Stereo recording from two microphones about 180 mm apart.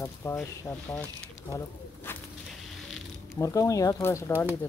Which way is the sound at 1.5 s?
20° left (ahead or behind).